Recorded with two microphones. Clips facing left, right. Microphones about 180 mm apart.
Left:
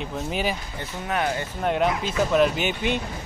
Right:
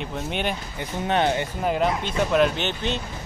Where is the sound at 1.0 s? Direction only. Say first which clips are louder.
Right 4 dB; 25° right (ahead or behind).